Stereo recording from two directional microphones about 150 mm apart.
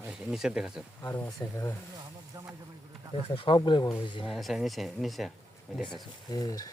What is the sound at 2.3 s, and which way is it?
Speech, 25° right (ahead or behind).